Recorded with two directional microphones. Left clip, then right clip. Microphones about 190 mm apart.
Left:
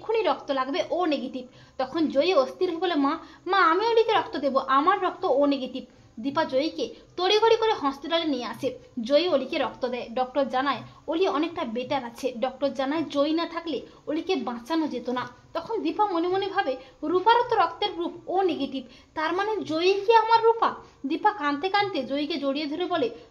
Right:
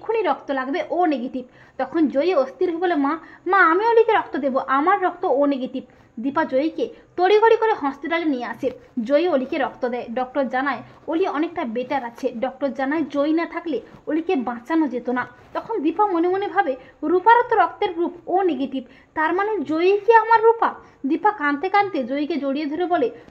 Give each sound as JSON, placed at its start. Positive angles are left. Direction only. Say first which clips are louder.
{"t": 0.0, "sound": "a woman's voice", "louder": "right 3 dB", "side_deg": -25}